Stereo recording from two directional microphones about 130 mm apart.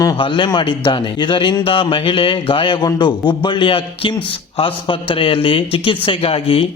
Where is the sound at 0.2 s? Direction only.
40° left (ahead or behind).